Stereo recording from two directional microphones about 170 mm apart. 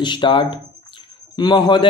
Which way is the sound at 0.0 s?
30° left (ahead or behind).